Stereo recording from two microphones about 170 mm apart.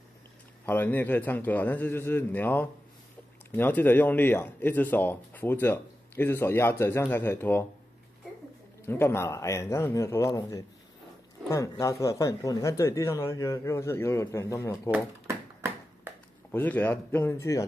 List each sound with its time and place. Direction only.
0.7 s speech: 10° left (ahead or behind)
8.8 s speech: 15° left (ahead or behind)
14.9 s a sound: 15° right (ahead or behind)
16.5 s speech: 10° left (ahead or behind)